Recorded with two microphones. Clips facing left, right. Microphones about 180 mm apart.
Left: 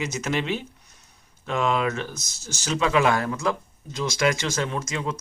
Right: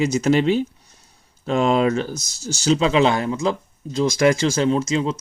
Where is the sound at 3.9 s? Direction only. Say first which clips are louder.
Right 7 dB; 35° right (ahead or behind).